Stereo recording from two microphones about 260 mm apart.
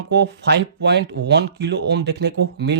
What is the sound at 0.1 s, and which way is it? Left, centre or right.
Speech, right.